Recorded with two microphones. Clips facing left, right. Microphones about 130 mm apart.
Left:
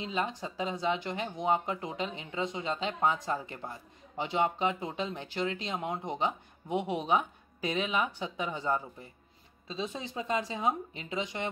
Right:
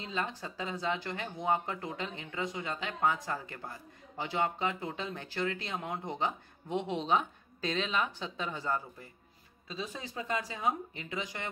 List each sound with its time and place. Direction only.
0.0 s speech: 15° left (ahead or behind)